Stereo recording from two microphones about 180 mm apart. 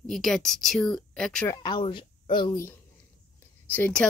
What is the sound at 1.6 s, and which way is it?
Speech, 25° left (ahead or behind).